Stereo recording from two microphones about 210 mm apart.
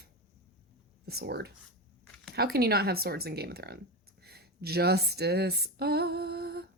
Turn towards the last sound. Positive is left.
turn(degrees=-45)  # may be behind; listen again after turning